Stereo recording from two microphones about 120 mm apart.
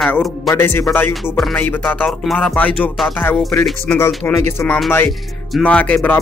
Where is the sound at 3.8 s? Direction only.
20° left (ahead or behind).